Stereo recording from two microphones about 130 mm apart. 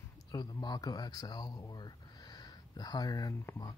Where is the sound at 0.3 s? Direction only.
30° left (ahead or behind).